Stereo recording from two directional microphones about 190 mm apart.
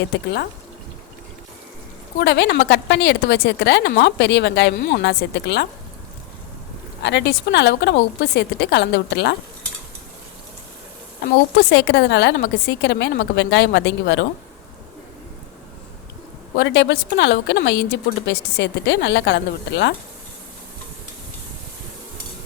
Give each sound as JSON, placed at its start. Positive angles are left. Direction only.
{"t": 2.2, "sound": "speech", "side_deg": 65}
{"t": 7.0, "sound": "speech", "side_deg": 65}
{"t": 11.5, "sound": "a woman's voice", "side_deg": 65}
{"t": 16.6, "sound": "a woman's voice", "side_deg": 65}